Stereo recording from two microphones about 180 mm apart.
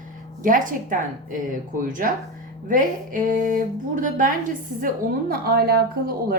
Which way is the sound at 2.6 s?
45° right (ahead or behind).